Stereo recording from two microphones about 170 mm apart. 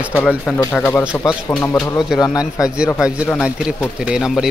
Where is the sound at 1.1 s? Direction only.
15° left (ahead or behind).